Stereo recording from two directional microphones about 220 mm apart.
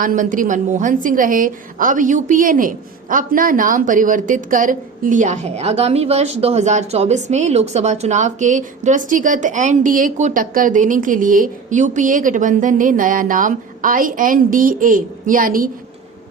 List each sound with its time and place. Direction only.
0.0 s a woman's voice: 40° right (ahead or behind)